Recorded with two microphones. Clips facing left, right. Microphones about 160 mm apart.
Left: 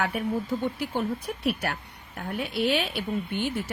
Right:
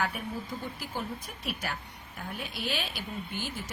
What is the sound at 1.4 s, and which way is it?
A woman's voice, 65° left (ahead or behind).